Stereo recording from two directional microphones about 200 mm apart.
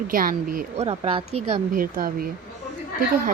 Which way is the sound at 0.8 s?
30° right (ahead or behind).